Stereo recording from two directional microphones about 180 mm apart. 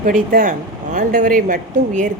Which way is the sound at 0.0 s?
45° right (ahead or behind).